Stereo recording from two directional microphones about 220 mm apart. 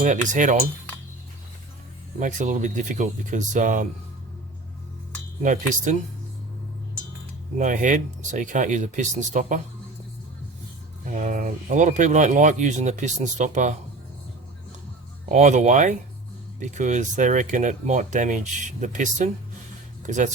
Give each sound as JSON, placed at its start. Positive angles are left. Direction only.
{"t": 0.0, "sound": "speech", "side_deg": -35}
{"t": 2.1, "sound": "speech", "side_deg": -35}
{"t": 5.4, "sound": "speech", "side_deg": -35}
{"t": 7.6, "sound": "speech", "side_deg": -35}
{"t": 11.0, "sound": "speech", "side_deg": -35}
{"t": 15.3, "sound": "speech", "side_deg": -30}